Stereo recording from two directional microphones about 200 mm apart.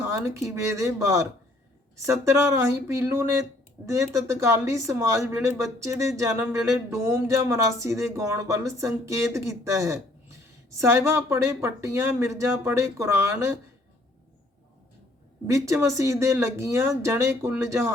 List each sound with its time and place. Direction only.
0.0 s speech: 15° right (ahead or behind)
15.4 s speech: 15° right (ahead or behind)